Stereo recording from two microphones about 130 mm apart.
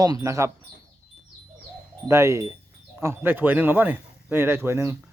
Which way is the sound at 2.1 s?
20° right (ahead or behind).